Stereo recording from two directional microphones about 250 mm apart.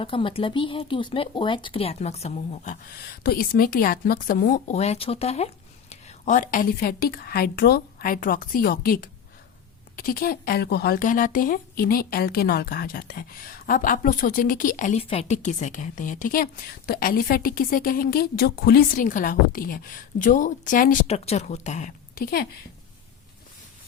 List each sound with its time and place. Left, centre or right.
0.0 s speech: left